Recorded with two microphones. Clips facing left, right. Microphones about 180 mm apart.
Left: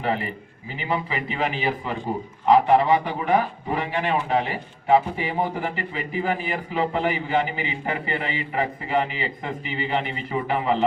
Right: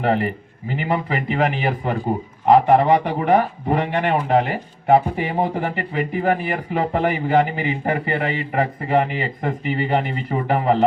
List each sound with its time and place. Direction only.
0.0 s a man's voice: 55° right (ahead or behind)